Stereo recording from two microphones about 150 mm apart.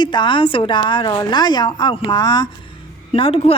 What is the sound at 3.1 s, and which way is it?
Speech, 40° left (ahead or behind).